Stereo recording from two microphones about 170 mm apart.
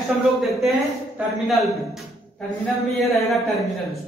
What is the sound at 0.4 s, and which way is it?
Speech, centre (ahead or behind).